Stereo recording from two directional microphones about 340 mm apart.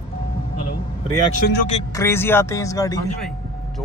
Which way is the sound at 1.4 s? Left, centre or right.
Left.